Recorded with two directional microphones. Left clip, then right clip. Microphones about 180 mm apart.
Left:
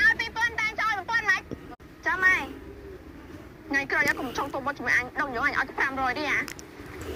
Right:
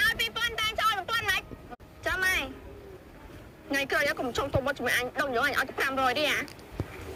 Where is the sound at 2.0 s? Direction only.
25° right (ahead or behind).